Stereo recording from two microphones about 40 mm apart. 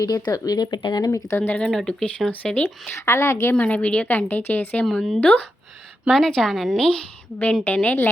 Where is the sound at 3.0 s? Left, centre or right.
Left.